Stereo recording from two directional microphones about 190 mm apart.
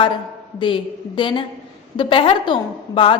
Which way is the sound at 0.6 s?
25° left (ahead or behind).